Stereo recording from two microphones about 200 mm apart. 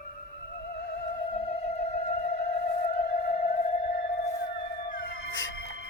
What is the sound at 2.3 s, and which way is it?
Theremin, 55° left (ahead or behind).